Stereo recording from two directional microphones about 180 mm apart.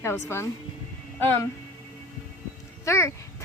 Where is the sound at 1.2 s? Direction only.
10° left (ahead or behind).